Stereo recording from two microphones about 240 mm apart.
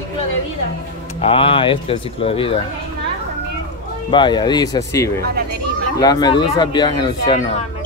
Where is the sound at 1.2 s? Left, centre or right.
Left.